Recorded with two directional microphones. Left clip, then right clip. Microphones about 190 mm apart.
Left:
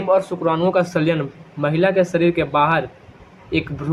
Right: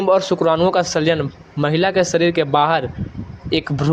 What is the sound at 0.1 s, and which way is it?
A man's voice, 40° right (ahead or behind).